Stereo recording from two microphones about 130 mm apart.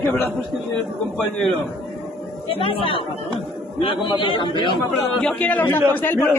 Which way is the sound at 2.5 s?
45° left (ahead or behind).